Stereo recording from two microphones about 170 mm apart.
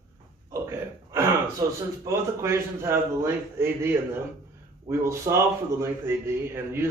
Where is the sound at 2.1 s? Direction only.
20° right (ahead or behind).